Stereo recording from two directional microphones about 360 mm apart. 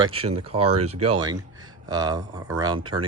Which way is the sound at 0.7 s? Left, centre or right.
Right.